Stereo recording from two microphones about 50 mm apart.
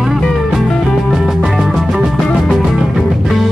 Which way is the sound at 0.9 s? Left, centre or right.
Centre.